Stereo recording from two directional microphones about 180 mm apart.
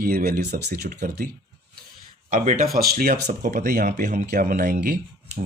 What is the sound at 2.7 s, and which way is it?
Speech, 55° right (ahead or behind).